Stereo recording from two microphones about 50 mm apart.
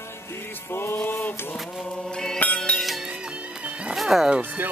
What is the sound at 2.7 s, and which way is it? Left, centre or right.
Music, centre.